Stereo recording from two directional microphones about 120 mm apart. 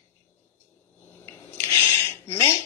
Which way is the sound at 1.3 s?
20° left (ahead or behind).